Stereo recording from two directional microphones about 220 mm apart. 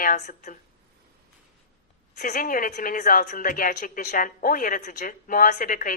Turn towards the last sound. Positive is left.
turn(degrees=40)  # may be behind; listen again after turning